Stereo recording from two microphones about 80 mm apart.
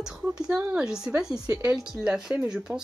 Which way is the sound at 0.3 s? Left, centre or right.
Centre.